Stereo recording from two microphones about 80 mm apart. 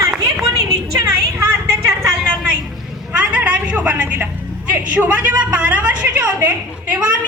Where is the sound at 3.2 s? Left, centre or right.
Centre.